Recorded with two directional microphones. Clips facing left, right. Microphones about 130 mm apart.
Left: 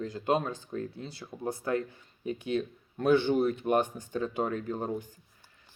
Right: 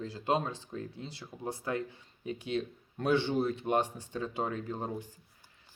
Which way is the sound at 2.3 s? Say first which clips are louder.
Left 3 dB; 30° right (ahead or behind).